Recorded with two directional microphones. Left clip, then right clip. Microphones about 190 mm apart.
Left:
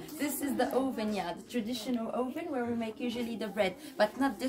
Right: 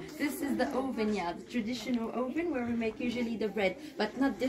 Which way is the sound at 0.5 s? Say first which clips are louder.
Left 3 dB; 35° left (ahead or behind).